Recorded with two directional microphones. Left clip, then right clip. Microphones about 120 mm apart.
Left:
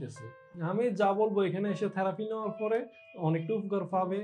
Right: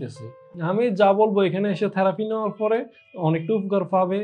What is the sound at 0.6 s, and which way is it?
A man's voice, 40° right (ahead or behind).